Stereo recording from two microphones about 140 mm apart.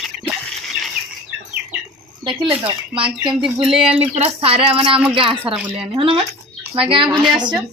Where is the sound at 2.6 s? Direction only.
40° right (ahead or behind).